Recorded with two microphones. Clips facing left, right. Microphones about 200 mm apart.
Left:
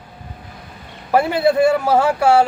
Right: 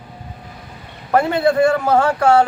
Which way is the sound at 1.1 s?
5° left (ahead or behind).